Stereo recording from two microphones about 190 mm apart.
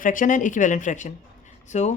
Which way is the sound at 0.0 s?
45° left (ahead or behind).